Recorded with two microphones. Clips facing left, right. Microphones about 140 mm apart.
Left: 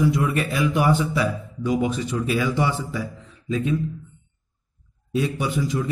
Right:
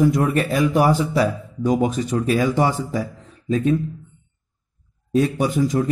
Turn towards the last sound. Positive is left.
turn(degrees=-45)  # may be behind; listen again after turning